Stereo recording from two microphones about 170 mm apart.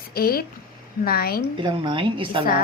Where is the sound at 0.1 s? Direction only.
60° left (ahead or behind).